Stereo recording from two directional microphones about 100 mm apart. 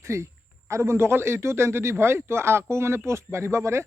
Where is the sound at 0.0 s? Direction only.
30° right (ahead or behind).